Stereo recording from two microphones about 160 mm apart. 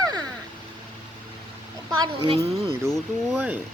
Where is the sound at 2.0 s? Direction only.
30° right (ahead or behind).